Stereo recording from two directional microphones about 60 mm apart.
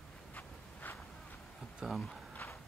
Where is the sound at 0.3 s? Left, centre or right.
Left.